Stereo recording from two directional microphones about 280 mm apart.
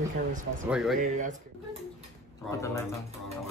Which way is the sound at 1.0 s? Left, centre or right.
Right.